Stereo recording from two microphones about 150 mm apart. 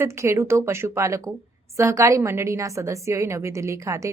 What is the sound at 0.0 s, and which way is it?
A woman's voice, 15° right (ahead or behind).